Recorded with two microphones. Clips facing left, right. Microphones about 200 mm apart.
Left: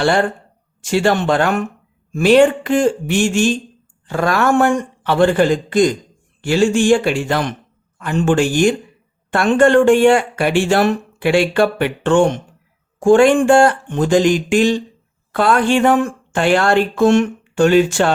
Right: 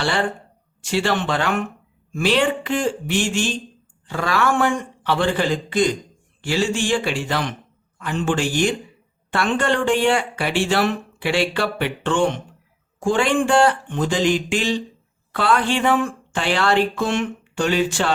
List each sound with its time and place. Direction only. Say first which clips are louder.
0.0 s speech: left 7 dB; 50° left (ahead or behind)